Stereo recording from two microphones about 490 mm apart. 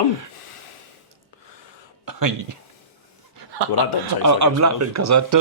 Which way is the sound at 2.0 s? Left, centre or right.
Right.